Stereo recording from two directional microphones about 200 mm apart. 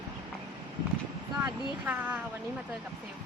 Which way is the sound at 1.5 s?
10° right (ahead or behind).